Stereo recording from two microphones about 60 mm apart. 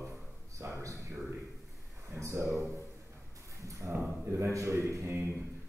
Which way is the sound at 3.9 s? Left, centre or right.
Right.